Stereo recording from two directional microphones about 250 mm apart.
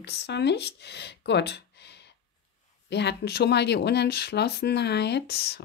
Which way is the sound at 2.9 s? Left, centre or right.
Left.